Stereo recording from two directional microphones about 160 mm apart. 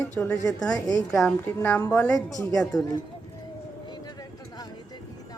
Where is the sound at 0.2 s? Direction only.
10° left (ahead or behind).